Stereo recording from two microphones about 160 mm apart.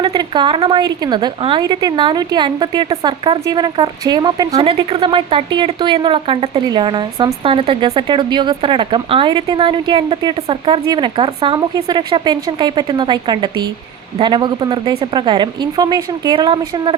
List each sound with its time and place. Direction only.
0.0 s speech: 25° right (ahead or behind)